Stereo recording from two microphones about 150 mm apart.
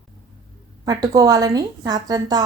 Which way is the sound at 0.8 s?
25° right (ahead or behind).